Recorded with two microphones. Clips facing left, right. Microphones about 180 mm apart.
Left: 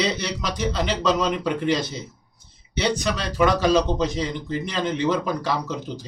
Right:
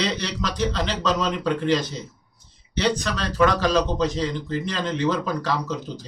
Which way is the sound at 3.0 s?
10° left (ahead or behind).